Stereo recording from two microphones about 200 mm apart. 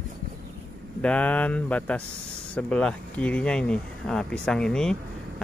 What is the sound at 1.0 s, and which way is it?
Speech, 5° left (ahead or behind).